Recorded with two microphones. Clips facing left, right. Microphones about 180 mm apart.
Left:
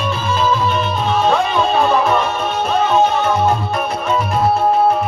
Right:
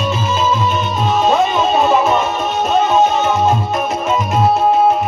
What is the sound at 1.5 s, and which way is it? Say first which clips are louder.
Music: right 1 dB; 5° right (ahead or behind).